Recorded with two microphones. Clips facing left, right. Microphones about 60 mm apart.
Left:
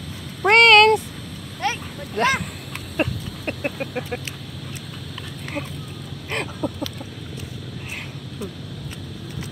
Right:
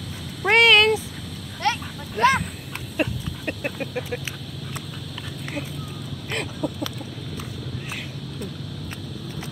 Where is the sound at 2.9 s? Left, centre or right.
Left.